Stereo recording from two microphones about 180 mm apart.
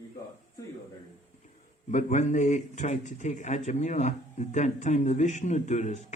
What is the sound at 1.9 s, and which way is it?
A man's voice, 40° left (ahead or behind).